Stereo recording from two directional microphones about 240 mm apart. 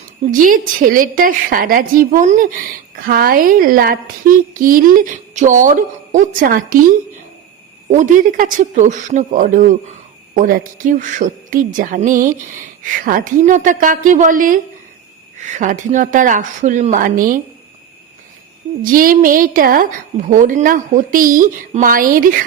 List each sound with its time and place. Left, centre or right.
0.3 s a woman's voice: right
7.9 s a woman's voice: right
18.8 s a woman's voice: right